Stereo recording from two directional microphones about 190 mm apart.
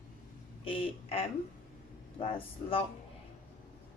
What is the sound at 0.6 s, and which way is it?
Speech, 30° left (ahead or behind).